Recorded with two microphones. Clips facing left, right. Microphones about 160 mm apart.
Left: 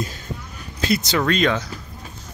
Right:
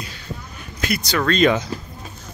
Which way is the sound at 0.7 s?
25° left (ahead or behind).